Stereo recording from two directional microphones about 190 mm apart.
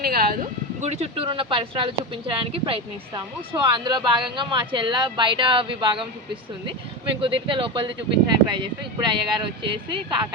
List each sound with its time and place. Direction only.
0.0 s speech: 50° right (ahead or behind)
0.8 s speech: 35° right (ahead or behind)
7.2 s speech: 25° right (ahead or behind)
9.6 s speech: 25° right (ahead or behind)